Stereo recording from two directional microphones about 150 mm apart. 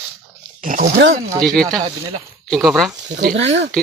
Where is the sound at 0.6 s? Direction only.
55° right (ahead or behind).